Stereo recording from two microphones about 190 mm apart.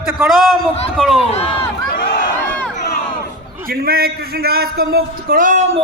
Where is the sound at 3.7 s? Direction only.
55° right (ahead or behind).